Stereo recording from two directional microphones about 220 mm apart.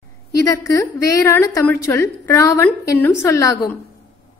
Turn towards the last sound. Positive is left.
turn(degrees=15)  # may be behind; listen again after turning